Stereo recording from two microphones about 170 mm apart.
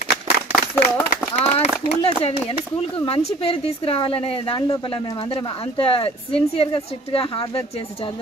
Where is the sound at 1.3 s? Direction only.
40° left (ahead or behind).